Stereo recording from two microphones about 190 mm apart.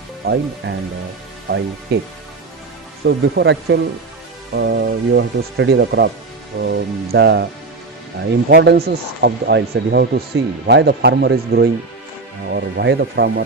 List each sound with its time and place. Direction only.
0.2 s speech: 55° right (ahead or behind)
1.9 s speech: 60° right (ahead or behind)
3.1 s speech: 65° right (ahead or behind)